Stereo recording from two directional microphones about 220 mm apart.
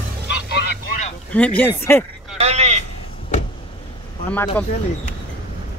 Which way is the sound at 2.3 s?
30° right (ahead or behind).